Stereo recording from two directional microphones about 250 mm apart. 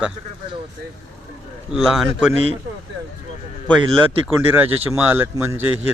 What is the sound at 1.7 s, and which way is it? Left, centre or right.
Speech, centre.